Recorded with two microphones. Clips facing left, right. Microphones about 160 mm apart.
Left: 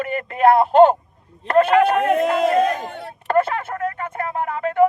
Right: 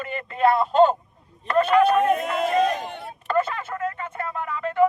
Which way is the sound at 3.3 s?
55° left (ahead or behind).